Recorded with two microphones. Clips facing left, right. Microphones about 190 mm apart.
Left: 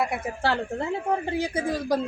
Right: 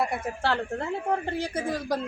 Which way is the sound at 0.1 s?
10° left (ahead or behind).